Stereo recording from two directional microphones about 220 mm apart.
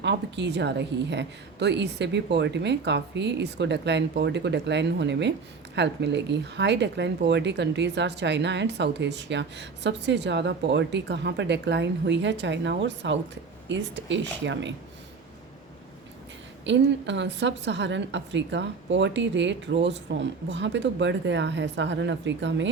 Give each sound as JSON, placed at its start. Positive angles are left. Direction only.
{"t": 0.0, "sound": "a woman's voice", "side_deg": -50}
{"t": 16.6, "sound": "a woman's voice", "side_deg": -55}